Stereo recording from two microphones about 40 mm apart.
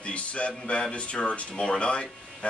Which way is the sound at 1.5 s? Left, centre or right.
Left.